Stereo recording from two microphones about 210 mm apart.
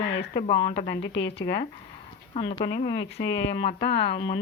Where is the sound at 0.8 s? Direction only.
55° left (ahead or behind).